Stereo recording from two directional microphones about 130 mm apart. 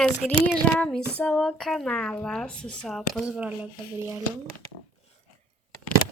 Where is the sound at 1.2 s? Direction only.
5° left (ahead or behind).